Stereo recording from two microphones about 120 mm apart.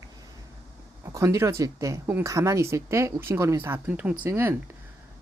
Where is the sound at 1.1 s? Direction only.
25° right (ahead or behind).